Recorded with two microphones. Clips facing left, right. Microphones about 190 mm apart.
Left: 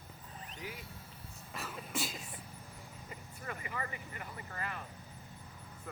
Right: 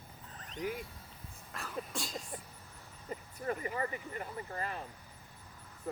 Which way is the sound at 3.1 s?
40° right (ahead or behind).